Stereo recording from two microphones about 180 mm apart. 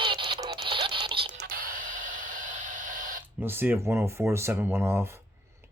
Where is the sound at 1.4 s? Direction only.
55° right (ahead or behind).